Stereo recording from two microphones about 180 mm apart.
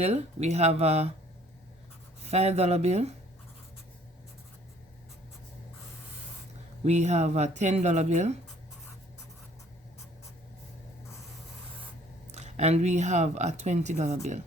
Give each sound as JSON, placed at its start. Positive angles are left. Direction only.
{"t": 0.0, "sound": "speech", "side_deg": -35}
{"t": 2.2, "sound": "speech", "side_deg": -35}
{"t": 6.8, "sound": "speech", "side_deg": -40}
{"t": 12.3, "sound": "speech", "side_deg": -40}